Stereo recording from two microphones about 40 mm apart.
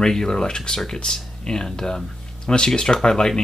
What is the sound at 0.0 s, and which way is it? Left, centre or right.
Speech, centre.